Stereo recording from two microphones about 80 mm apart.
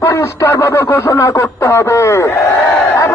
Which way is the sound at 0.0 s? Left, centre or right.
Left.